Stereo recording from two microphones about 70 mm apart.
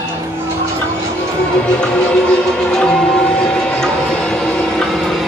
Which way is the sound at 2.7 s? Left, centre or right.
Centre.